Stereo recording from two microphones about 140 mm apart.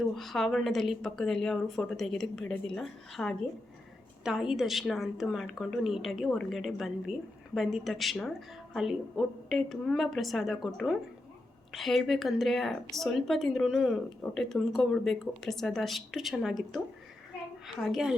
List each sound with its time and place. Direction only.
0.0 s a woman's voice: centre (ahead or behind)